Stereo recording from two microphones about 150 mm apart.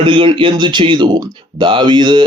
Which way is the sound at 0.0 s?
35° right (ahead or behind).